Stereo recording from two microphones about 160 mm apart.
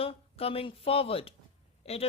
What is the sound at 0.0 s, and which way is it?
Speech, 35° left (ahead or behind).